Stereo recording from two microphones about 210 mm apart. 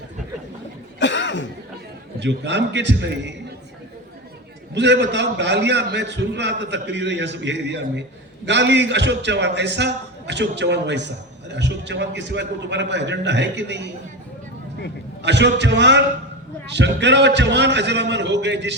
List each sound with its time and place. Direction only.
0.9 s cough: 60° left (ahead or behind)
2.1 s a man's voice: 55° right (ahead or behind)
4.7 s a man's voice: 55° right (ahead or behind)
15.2 s a man's voice: 55° right (ahead or behind)